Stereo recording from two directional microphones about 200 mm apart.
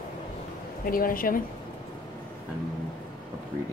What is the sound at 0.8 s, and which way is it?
Speech, 45° left (ahead or behind).